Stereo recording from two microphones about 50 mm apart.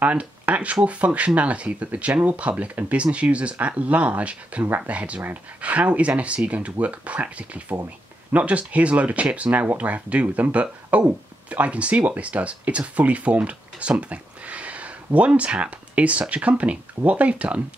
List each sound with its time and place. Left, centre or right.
0.0 s speech: right